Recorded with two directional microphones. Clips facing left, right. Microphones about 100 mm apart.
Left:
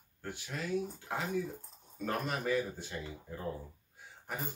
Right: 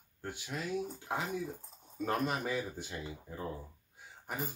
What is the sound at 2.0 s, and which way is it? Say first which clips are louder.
Speech: right 1 dB; 20° right (ahead or behind).